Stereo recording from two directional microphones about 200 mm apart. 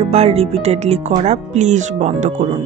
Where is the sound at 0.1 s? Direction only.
30° right (ahead or behind).